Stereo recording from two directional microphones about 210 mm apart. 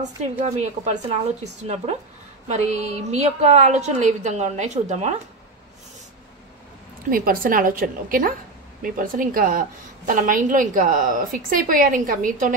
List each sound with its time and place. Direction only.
0.0 s a woman's voice: 35° right (ahead or behind)
7.1 s a woman's voice: 40° right (ahead or behind)